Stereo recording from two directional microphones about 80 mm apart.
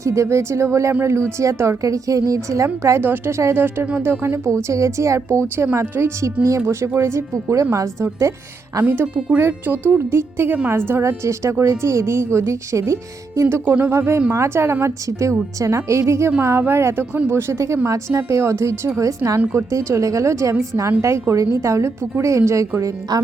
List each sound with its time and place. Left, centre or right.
0.0 s a woman's voice: right
3.0 s a woman's voice: right
5.8 s a woman's voice: right
8.8 s a woman's voice: right
13.7 s a woman's voice: right